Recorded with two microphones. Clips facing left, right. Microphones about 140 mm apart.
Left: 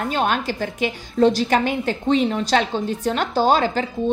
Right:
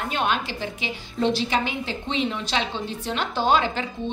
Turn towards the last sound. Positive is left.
turn(degrees=40)  # may be behind; listen again after turning